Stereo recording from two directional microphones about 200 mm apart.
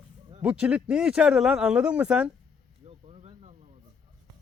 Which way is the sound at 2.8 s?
30° right (ahead or behind).